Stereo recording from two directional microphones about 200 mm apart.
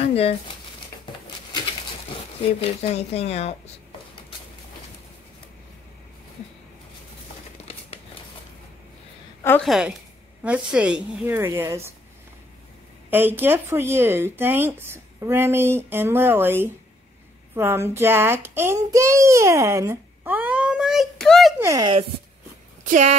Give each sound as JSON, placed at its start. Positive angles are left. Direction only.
{"t": 0.0, "sound": "a sound", "side_deg": 30}
{"t": 2.8, "sound": "speech", "side_deg": 30}
{"t": 7.6, "sound": "a sound", "side_deg": 30}
{"t": 9.4, "sound": "a woman's voice", "side_deg": 10}
{"t": 9.7, "sound": "a woman's voice", "side_deg": -5}
{"t": 13.1, "sound": "a child's voice", "side_deg": -10}
{"t": 21.5, "sound": "speech", "side_deg": -15}
{"t": 22.8, "sound": "speech", "side_deg": -35}